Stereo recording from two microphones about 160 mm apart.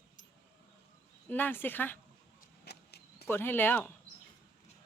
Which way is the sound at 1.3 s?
10° left (ahead or behind).